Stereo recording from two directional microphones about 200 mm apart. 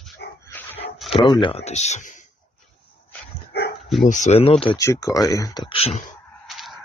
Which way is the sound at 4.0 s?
40° left (ahead or behind).